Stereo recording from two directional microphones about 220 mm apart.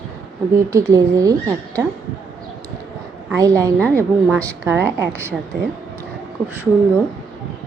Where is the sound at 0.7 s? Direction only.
15° right (ahead or behind).